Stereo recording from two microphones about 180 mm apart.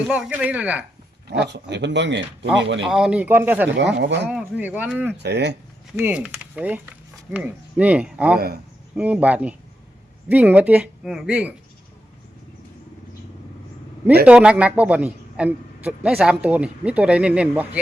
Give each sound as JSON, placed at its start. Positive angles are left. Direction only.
{"t": 0.1, "sound": "a man's voice", "side_deg": -5}
{"t": 1.3, "sound": "speech", "side_deg": -70}
{"t": 2.8, "sound": "a man's voice", "side_deg": -5}
{"t": 3.9, "sound": "speech", "side_deg": -75}
{"t": 4.3, "sound": "a man's voice", "side_deg": -5}
{"t": 5.1, "sound": "speech", "side_deg": -70}
{"t": 6.0, "sound": "a man's voice", "side_deg": -10}
{"t": 8.4, "sound": "speech", "side_deg": -60}
{"t": 9.0, "sound": "a man's voice", "side_deg": -10}
{"t": 14.3, "sound": "a man's voice", "side_deg": -5}